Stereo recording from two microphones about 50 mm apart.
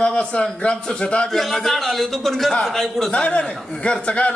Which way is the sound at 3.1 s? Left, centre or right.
Left.